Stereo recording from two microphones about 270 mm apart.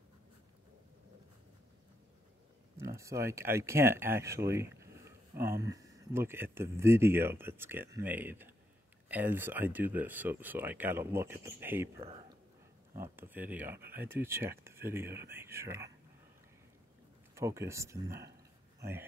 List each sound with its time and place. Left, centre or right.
2.8 s speech: centre
12.0 s speech: right
12.9 s speech: centre
17.4 s speech: centre